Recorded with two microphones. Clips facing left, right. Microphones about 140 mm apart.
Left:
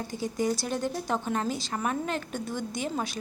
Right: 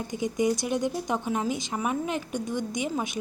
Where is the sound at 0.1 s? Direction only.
20° right (ahead or behind).